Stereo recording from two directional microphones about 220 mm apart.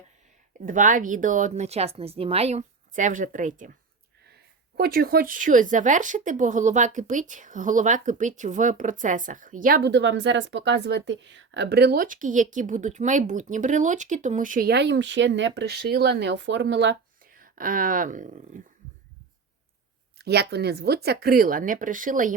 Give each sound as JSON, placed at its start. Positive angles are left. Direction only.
{"t": 0.6, "sound": "speech", "side_deg": -35}
{"t": 4.8, "sound": "speech", "side_deg": -45}
{"t": 20.1, "sound": "speech", "side_deg": -50}